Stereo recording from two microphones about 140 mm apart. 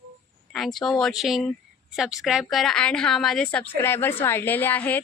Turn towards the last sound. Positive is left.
turn(degrees=10)  # may be behind; listen again after turning